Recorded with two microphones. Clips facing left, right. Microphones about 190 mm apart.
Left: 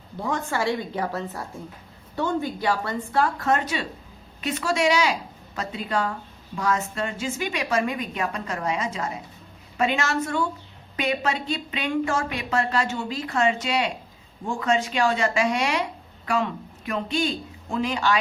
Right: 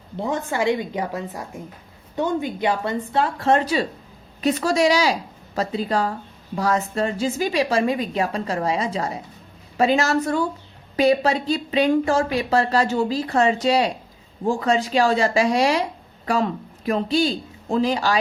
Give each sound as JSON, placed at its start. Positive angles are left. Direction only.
{"t": 0.2, "sound": "a woman's voice", "side_deg": -20}